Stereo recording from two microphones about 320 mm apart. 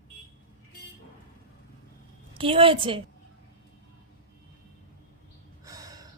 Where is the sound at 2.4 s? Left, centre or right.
Centre.